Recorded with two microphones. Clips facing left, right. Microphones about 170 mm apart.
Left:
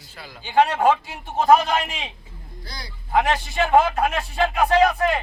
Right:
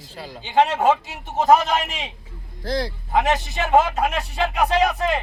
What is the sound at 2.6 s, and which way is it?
Speech, 90° right.